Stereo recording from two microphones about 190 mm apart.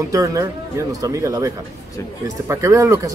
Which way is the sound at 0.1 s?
15° right (ahead or behind).